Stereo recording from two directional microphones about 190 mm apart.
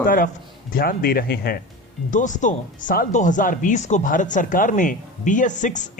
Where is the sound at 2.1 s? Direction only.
40° left (ahead or behind).